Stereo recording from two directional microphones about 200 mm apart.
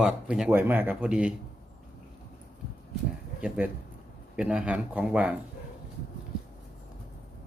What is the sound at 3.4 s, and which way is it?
Speech, 5° right (ahead or behind).